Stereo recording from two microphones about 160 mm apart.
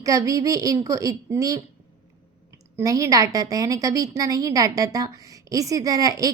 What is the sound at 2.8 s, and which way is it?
A woman's voice, 20° right (ahead or behind).